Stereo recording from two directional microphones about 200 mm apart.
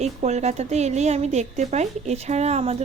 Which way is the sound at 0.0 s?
35° right (ahead or behind).